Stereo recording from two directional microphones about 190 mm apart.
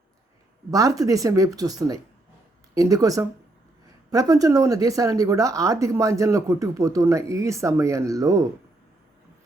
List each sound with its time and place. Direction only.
0.7 s speech: 20° right (ahead or behind)